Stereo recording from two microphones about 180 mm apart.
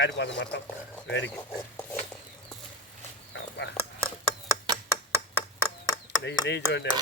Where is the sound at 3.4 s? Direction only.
75° left (ahead or behind).